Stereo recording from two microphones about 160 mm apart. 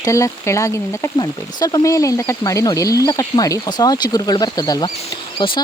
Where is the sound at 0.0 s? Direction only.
20° left (ahead or behind).